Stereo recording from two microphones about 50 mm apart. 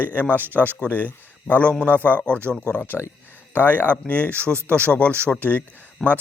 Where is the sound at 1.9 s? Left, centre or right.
Left.